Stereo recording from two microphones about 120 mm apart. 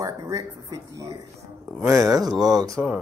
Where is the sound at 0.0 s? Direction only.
25° right (ahead or behind).